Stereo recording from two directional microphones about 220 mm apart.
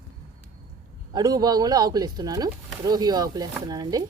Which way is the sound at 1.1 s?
20° right (ahead or behind).